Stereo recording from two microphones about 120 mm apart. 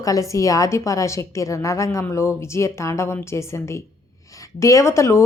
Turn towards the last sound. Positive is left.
turn(degrees=25)  # may be behind; listen again after turning